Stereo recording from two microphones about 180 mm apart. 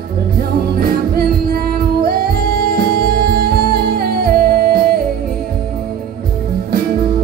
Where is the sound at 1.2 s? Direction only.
55° right (ahead or behind).